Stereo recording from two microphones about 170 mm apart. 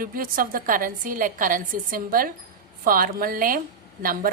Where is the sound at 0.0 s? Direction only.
55° right (ahead or behind).